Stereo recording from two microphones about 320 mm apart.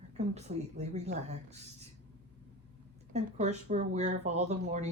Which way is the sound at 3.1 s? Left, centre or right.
Right.